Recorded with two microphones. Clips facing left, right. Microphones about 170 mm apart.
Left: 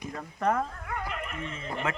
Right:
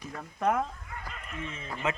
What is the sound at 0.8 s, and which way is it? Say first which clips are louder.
Dog: left 8 dB; 70° left (ahead or behind).